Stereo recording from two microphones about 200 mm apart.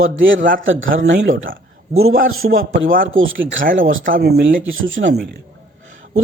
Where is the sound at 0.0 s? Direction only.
70° right (ahead or behind).